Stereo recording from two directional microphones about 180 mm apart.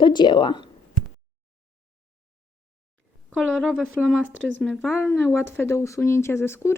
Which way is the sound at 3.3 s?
Centre (ahead or behind).